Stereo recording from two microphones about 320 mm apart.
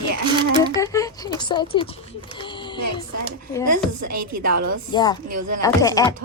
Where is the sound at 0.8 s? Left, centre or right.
Centre.